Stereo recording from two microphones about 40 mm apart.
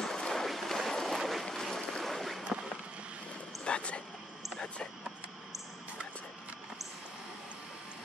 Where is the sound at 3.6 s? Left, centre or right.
Left.